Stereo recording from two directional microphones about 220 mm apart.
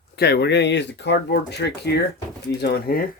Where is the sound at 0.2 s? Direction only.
50° left (ahead or behind).